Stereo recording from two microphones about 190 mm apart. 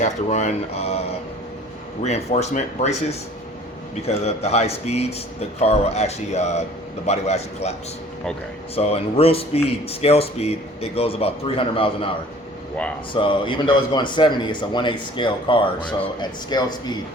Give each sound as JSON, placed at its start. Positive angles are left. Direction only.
{"t": 0.0, "sound": "speech", "side_deg": 40}
{"t": 8.7, "sound": "speech", "side_deg": 30}
{"t": 13.1, "sound": "speech", "side_deg": 25}